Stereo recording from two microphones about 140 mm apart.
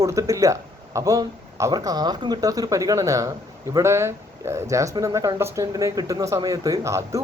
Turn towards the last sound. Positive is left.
turn(degrees=-20)  # may be behind; listen again after turning